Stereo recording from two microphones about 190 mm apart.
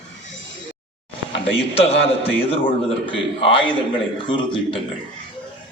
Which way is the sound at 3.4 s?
25° left (ahead or behind).